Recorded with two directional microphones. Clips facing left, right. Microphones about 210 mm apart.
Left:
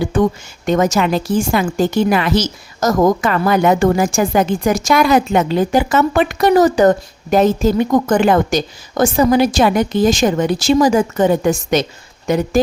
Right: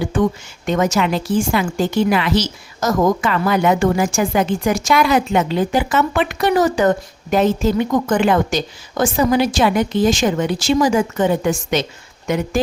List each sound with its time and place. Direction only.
0.2 s a woman's voice: 40° left (ahead or behind)